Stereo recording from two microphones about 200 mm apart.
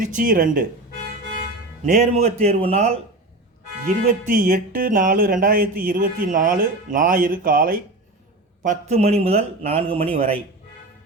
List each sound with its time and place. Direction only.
0.0 s speech: 45° right (ahead or behind)
1.9 s a man's voice: 35° right (ahead or behind)
3.8 s speech: 45° right (ahead or behind)
8.6 s a man's voice: 30° right (ahead or behind)